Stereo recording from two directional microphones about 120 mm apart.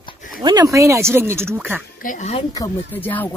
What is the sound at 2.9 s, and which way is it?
Speech, 15° left (ahead or behind).